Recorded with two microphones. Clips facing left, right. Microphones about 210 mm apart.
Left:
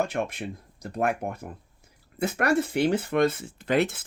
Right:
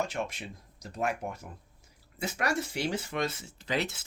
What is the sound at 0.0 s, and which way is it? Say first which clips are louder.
Speech: left 6 dB; 55° left (ahead or behind).